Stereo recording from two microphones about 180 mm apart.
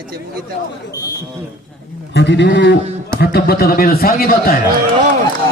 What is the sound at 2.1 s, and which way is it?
Speech, 70° left (ahead or behind).